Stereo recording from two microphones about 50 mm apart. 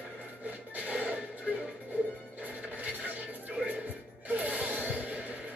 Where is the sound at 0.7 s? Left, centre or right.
Right.